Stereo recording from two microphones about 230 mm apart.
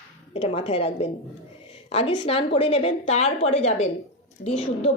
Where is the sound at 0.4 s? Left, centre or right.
Left.